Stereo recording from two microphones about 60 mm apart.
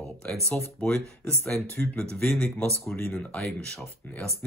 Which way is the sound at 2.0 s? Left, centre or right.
Centre.